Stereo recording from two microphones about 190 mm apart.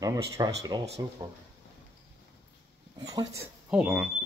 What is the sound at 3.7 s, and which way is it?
Speech, 5° right (ahead or behind).